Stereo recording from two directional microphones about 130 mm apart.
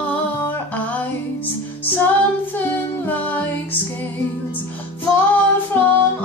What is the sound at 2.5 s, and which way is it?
Music, 15° left (ahead or behind).